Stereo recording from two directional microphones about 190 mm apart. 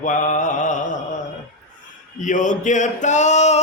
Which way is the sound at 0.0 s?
40° left (ahead or behind).